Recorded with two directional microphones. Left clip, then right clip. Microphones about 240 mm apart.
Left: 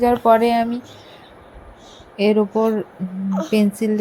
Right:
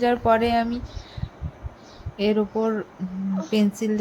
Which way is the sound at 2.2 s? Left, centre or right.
Centre.